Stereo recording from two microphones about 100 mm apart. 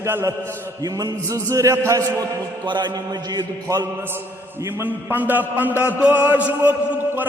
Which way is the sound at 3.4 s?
40° right (ahead or behind).